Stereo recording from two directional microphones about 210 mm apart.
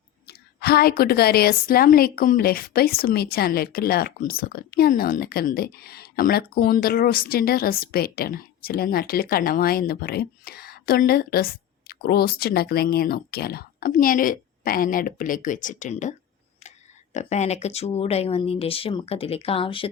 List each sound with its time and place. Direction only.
0.3 s a woman's voice: 50° left (ahead or behind)
17.2 s speech: 35° left (ahead or behind)